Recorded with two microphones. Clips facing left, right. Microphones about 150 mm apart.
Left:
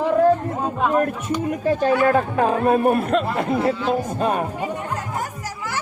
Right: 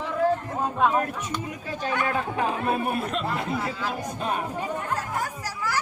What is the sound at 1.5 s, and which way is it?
A man's voice, 50° left (ahead or behind).